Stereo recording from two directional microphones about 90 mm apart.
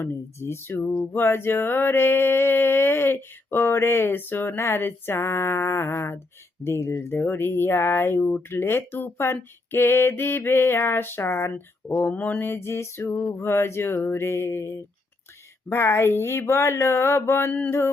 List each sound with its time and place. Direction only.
0.0 s speech: 30° left (ahead or behind)